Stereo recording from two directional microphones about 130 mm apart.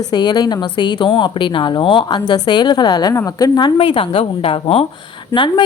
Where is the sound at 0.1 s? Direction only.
35° left (ahead or behind).